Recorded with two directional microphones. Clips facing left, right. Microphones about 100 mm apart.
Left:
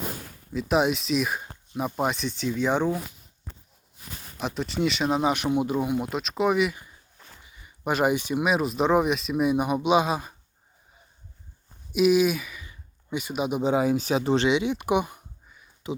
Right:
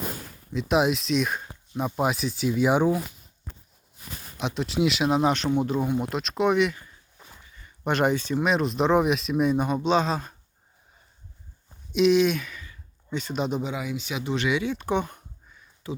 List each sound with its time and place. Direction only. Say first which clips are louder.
0.5 s speech: even; centre (ahead or behind)
4.4 s speech: right 2 dB; centre (ahead or behind)
5.3 s speech: even; 10° left (ahead or behind)
7.4 s a sound: even; 10° left (ahead or behind)
8.1 s speech: even; 15° left (ahead or behind)
11.9 s speech: even; 5° left (ahead or behind)
12.6 s a sound: even; 15° left (ahead or behind)
13.6 s speech: left 8 dB; 35° left (ahead or behind); by 15.6 s 10° left (ahead or behind)
15.9 s speech: left 2 dB; 20° left (ahead or behind)